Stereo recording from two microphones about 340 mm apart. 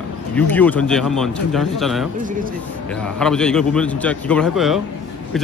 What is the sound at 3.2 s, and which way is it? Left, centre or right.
Speech, centre.